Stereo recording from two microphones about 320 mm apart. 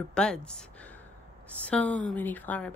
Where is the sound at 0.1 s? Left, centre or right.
Centre.